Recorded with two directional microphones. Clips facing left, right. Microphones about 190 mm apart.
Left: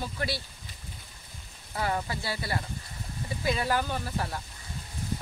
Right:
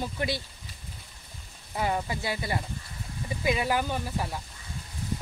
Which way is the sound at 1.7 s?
15° right (ahead or behind).